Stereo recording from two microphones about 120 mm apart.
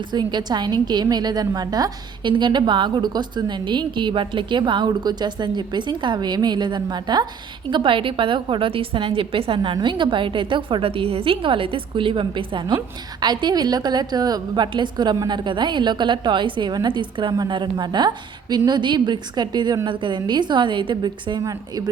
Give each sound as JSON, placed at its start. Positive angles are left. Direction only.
{"t": 0.1, "sound": "a woman's voice", "side_deg": -40}